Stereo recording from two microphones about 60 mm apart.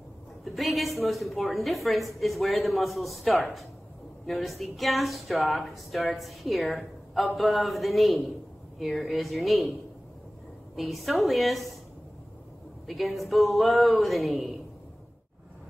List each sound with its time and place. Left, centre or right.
0.4 s a woman's voice: centre
10.8 s a woman's voice: centre
12.8 s a woman's voice: centre